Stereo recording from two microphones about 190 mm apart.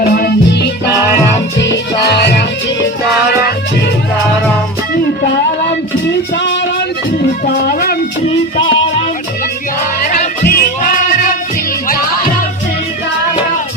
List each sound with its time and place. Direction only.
0.1 s music: 55° left (ahead or behind)
2.0 s music: 60° left (ahead or behind)
6.3 s music: 65° left (ahead or behind)
7.4 s music: 50° left (ahead or behind)
8.2 s music: 30° left (ahead or behind)
10.0 s music: 45° left (ahead or behind)